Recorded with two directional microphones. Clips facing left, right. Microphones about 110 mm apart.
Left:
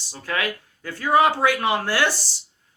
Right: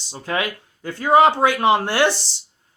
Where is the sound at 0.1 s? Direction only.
25° right (ahead or behind).